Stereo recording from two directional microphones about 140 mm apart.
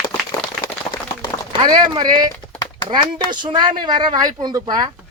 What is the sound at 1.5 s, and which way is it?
Speech, 30° right (ahead or behind).